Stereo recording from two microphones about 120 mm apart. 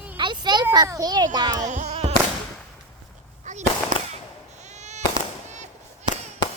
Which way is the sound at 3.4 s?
80° right.